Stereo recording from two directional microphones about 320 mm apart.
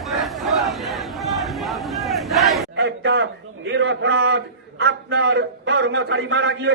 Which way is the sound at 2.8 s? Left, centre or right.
Right.